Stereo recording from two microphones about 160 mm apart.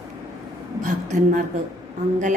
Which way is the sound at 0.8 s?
50° right (ahead or behind).